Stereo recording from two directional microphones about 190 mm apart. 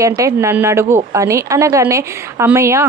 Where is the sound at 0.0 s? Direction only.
15° right (ahead or behind).